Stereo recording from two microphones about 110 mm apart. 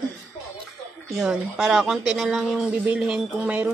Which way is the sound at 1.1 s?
5° right (ahead or behind).